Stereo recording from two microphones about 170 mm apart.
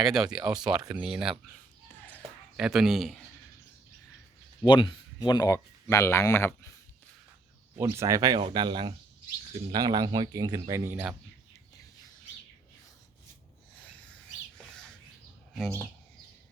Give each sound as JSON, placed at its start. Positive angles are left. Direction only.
{"t": 0.0, "sound": "speech", "side_deg": -5}
{"t": 0.8, "sound": "speech", "side_deg": -20}
{"t": 1.0, "sound": "speech", "side_deg": -5}
{"t": 2.6, "sound": "speech", "side_deg": -5}
{"t": 4.6, "sound": "speech", "side_deg": 30}
{"t": 7.8, "sound": "speech", "side_deg": -15}